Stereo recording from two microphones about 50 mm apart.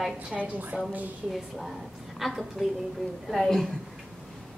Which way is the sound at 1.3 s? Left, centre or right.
Centre.